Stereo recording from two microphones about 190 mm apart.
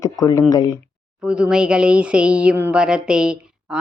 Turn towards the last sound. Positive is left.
turn(degrees=-5)  # may be behind; listen again after turning